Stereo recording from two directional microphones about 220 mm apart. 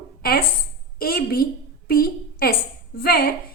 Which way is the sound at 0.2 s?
45° left (ahead or behind).